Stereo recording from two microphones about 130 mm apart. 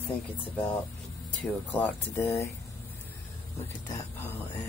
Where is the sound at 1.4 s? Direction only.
10° left (ahead or behind).